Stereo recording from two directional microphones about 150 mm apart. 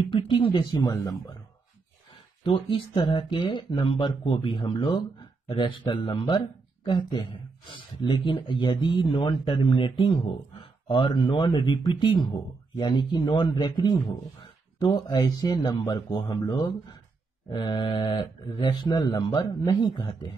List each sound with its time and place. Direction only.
0.1 s speech: 35° left (ahead or behind)
2.4 s speech: 35° left (ahead or behind)